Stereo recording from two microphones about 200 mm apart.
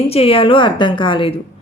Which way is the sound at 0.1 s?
30° left (ahead or behind).